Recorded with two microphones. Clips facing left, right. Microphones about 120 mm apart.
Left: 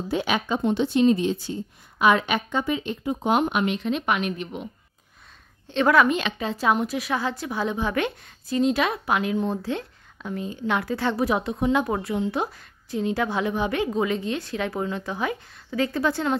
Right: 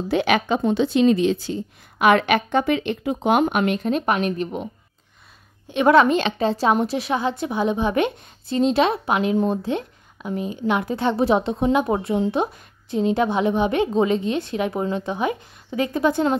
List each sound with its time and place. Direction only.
0.1 s speech: 75° right (ahead or behind); by 4.6 s 40° right (ahead or behind)
5.7 s a woman's voice: 15° right (ahead or behind)
5.9 s a woman's voice: 35° right (ahead or behind); by 16.3 s 20° right (ahead or behind)